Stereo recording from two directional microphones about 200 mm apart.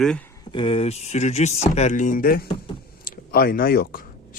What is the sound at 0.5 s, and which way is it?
Speech, 25° left (ahead or behind).